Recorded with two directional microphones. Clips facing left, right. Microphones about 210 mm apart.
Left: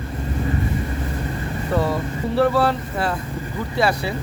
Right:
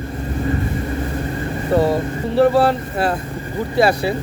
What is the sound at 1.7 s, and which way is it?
Speech, 30° right (ahead or behind).